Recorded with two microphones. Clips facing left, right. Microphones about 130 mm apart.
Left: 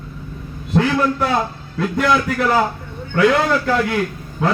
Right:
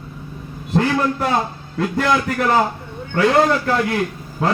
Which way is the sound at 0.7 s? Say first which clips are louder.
Left 1 dB; 35° right (ahead or behind).